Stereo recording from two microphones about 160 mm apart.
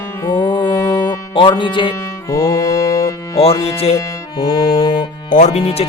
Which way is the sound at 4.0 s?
25° left (ahead or behind).